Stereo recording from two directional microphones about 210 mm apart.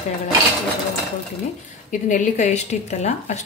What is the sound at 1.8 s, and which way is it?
A woman's voice, 35° left (ahead or behind).